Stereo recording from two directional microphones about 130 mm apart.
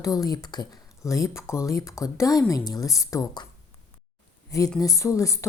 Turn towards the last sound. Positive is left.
turn(degrees=25)  # may be behind; listen again after turning